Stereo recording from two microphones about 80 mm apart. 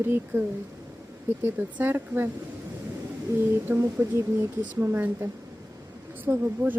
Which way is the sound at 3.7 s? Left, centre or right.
Right.